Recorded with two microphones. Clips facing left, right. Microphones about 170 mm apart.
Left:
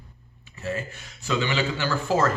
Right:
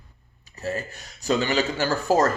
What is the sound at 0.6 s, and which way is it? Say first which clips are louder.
Speech: right 1 dB; 40° right (ahead or behind).